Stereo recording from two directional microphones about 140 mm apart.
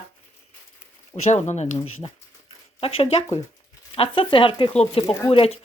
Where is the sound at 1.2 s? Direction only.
55° left (ahead or behind).